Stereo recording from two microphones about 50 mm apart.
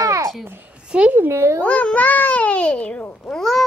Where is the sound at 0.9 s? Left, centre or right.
Centre.